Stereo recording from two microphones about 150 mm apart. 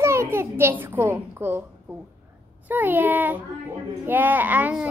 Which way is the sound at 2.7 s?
10° right (ahead or behind).